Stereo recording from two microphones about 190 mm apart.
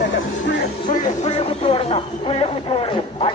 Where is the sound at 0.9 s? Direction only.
40° left (ahead or behind).